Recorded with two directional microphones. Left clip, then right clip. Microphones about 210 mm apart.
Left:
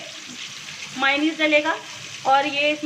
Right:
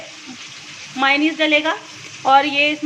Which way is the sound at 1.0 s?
25° right (ahead or behind).